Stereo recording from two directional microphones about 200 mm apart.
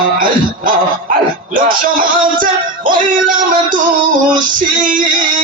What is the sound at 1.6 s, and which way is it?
Music, 45° right (ahead or behind).